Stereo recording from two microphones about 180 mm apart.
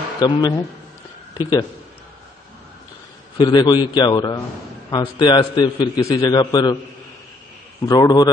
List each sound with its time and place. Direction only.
0.2 s a man's voice: 25° left (ahead or behind)
3.3 s a man's voice: 25° left (ahead or behind)
7.8 s a man's voice: 20° left (ahead or behind)